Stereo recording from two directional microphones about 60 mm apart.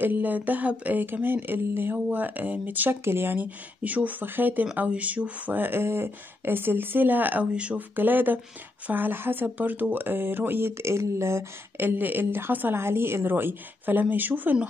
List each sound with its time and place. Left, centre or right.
0.0 s speech: right
3.0 s speech: right
3.3 s speech: right
7.5 s speech: centre
7.9 s speech: right
11.8 s speech: right